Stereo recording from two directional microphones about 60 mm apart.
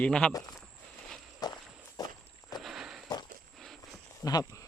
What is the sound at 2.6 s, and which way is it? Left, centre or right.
Walk, centre.